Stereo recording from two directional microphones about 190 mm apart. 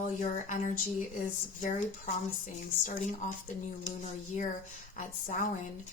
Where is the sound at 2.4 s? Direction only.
40° left (ahead or behind).